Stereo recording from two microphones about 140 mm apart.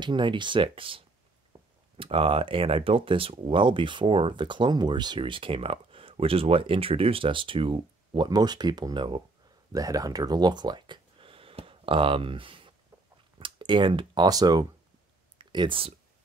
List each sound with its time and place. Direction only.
0.0 s speech: 35° right (ahead or behind)
9.7 s speech: 25° right (ahead or behind)
15.3 s a sound: 35° right (ahead or behind)